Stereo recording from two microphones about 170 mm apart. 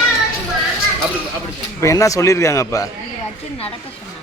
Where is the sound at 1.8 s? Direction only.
20° left (ahead or behind).